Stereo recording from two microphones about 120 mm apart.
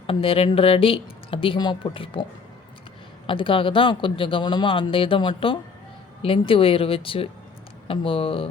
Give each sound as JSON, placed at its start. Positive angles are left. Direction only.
{"t": 0.1, "sound": "speech", "side_deg": 50}
{"t": 3.2, "sound": "speech", "side_deg": 45}